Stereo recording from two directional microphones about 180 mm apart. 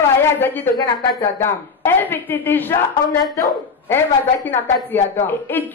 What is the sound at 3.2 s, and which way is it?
Speech, centre (ahead or behind).